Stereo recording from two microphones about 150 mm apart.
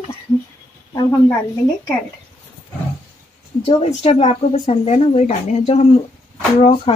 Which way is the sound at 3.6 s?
45° left (ahead or behind).